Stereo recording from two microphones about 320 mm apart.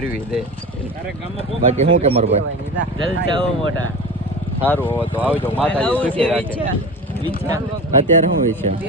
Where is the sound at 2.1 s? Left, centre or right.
Centre.